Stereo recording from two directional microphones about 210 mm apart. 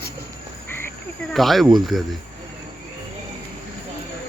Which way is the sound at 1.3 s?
Centre (ahead or behind).